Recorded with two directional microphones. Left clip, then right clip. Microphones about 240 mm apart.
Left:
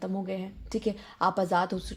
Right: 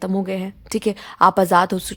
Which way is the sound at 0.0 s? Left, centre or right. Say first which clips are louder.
Right 10 dB; right.